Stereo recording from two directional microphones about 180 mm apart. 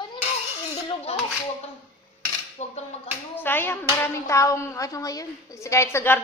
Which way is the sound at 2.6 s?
40° left (ahead or behind).